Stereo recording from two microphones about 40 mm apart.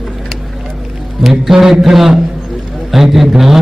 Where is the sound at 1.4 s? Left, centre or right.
Centre.